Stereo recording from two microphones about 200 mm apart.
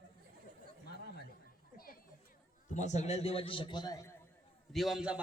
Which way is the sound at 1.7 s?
45° left (ahead or behind).